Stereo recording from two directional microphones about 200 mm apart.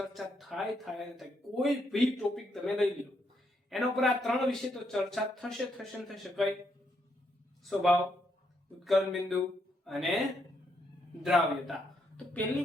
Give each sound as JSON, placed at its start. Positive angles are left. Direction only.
{"t": 0.0, "sound": "speech", "side_deg": 0}
{"t": 7.6, "sound": "speech", "side_deg": 0}
{"t": 11.2, "sound": "speech", "side_deg": 0}